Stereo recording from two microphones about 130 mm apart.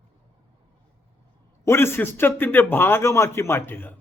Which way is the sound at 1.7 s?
20° left (ahead or behind).